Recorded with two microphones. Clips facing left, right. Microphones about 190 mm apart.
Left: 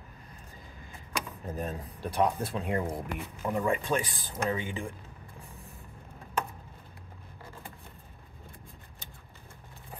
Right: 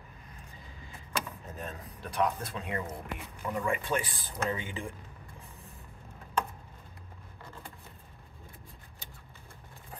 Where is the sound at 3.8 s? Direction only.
15° left (ahead or behind).